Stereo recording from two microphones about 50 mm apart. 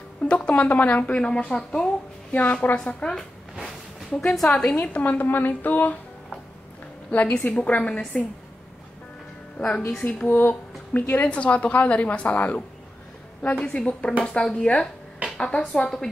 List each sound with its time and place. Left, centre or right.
0.2 s speech: left
2.3 s speech: left
2.8 s speech: centre
3.6 s a sound: centre
4.8 s speech: left
7.1 s speech: left
9.6 s a woman's voice: left
10.0 s speech: left
11.2 s a woman's voice: left